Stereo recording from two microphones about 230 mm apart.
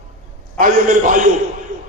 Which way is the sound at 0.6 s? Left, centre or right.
Right.